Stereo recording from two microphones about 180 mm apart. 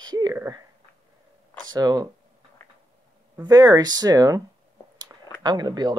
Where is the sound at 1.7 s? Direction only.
20° right (ahead or behind).